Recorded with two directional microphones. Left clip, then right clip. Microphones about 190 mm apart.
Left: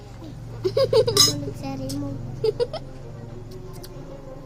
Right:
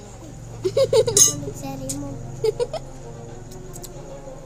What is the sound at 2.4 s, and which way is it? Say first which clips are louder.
Speech: right 1 dB; 15° right (ahead or behind).